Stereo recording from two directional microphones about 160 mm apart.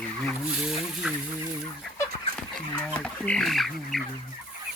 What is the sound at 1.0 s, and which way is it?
Fowl, 5° right (ahead or behind).